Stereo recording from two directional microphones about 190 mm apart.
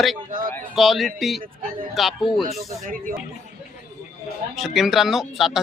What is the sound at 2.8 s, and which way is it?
Speech, 45° right (ahead or behind).